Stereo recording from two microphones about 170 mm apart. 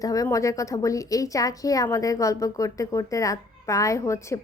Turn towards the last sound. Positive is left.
turn(degrees=20)  # may be behind; listen again after turning